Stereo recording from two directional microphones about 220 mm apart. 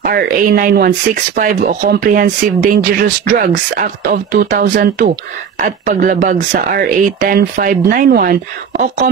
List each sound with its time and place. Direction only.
0.0 s speech: 40° right (ahead or behind)